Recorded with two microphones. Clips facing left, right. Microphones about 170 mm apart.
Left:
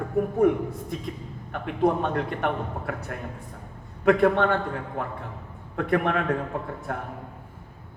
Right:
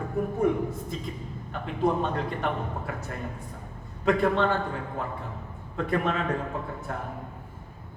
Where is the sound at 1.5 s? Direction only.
65° left (ahead or behind).